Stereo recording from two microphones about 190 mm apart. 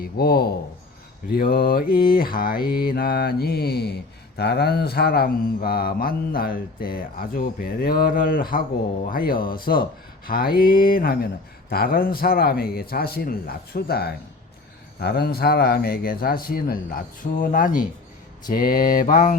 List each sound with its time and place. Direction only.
0.0 s mantra: 55° left (ahead or behind)